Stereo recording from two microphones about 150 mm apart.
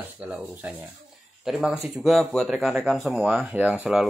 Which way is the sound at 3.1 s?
10° right (ahead or behind).